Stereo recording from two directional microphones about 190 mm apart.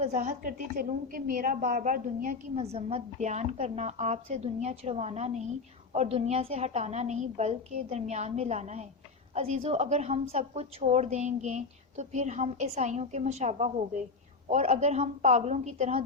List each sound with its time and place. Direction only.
0.0 s a woman's voice: 40° right (ahead or behind)